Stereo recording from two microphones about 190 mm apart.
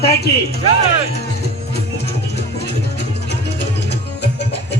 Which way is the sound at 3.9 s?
60° left (ahead or behind).